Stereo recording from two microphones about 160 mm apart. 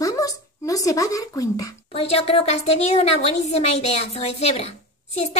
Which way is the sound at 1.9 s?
35° left (ahead or behind).